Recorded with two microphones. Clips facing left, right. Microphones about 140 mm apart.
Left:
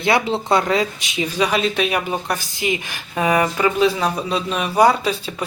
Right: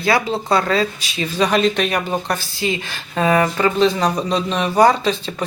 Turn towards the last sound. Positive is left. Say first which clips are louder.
# right 2 dB
turn(degrees=10)  # may be behind; listen again after turning